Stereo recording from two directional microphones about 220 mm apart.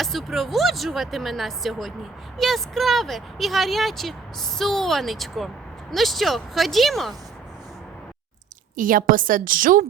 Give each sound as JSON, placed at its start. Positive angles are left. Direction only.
{"t": 0.0, "sound": "speech", "side_deg": 0}
{"t": 8.7, "sound": "a woman's voice", "side_deg": -40}